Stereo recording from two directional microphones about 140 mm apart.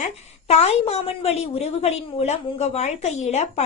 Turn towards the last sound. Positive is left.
turn(degrees=55)  # may be behind; listen again after turning